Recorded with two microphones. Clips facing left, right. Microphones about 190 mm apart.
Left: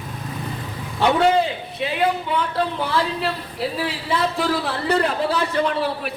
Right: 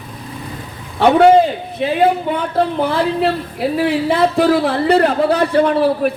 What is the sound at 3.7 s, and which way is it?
A man's voice, 55° right (ahead or behind).